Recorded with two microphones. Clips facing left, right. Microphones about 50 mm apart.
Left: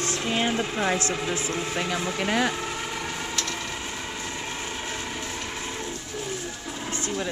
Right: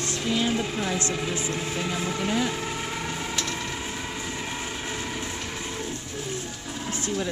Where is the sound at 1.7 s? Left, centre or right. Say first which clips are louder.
Left 1 dB; left.